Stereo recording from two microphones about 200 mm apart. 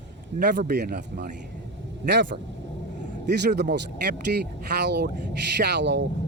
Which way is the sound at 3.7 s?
55° right (ahead or behind).